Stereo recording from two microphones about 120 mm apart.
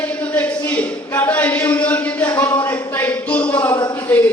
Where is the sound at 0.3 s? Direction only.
10° left (ahead or behind).